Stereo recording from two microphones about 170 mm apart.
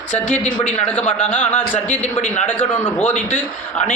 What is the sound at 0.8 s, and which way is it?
A man's voice, 10° left (ahead or behind).